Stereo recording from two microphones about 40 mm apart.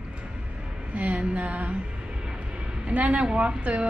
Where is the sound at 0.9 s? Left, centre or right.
Right.